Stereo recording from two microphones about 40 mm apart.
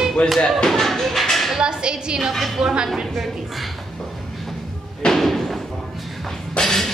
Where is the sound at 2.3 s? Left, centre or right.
Centre.